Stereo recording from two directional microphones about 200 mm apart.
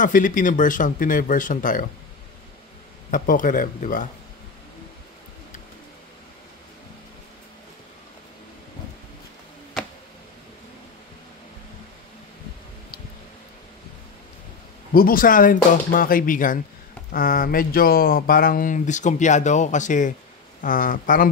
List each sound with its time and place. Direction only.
0.0 s speech: 40° left (ahead or behind)
3.1 s speech: 40° left (ahead or behind)
15.0 s speech: 45° left (ahead or behind)